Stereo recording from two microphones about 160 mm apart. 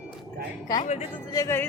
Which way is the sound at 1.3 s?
15° left (ahead or behind).